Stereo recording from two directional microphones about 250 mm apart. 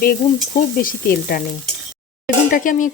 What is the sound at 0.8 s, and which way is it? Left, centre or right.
Speech, left.